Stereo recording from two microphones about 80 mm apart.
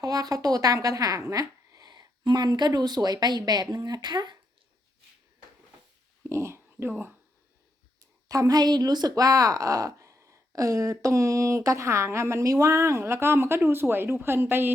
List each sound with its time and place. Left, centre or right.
0.0 s a woman's voice: right
6.2 s a sound: right
8.3 s a woman's voice: right